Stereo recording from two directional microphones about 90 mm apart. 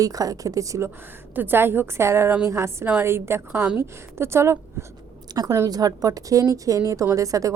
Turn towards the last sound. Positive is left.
turn(degrees=-40)  # may be behind; listen again after turning